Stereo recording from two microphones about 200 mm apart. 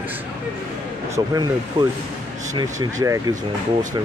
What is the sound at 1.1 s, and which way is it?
Speech, 20° right (ahead or behind).